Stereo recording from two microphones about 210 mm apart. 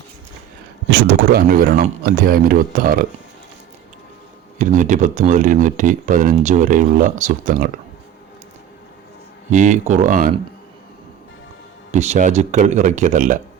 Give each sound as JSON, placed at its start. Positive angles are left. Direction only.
{"t": 0.9, "sound": "speech", "side_deg": -45}
{"t": 4.5, "sound": "speech", "side_deg": -40}
{"t": 9.5, "sound": "speech", "side_deg": -35}
{"t": 11.9, "sound": "speech", "side_deg": -35}